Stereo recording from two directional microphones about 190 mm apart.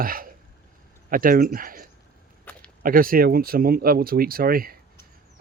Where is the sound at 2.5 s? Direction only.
10° left (ahead or behind).